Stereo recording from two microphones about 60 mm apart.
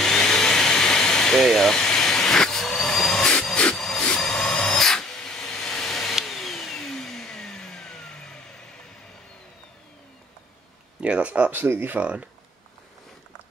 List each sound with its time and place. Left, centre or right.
0.0 s vacuum cleaner: centre
3.7 s a sound: centre
4.2 s tools: centre
11.0 s speech: right
11.5 s speech: right
12.0 s speech: right